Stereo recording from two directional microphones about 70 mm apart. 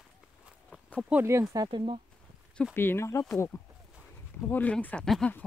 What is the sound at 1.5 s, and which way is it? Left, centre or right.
Speech, right.